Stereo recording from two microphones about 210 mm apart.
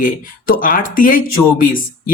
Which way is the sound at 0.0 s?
40° left (ahead or behind).